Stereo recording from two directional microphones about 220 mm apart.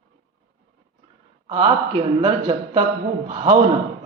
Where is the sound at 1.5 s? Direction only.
25° right (ahead or behind).